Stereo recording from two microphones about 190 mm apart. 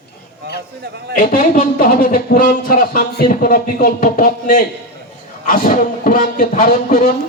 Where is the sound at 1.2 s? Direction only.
50° left (ahead or behind).